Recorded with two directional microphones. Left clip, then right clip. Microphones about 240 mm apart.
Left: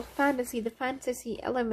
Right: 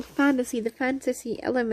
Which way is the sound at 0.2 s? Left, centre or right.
Right.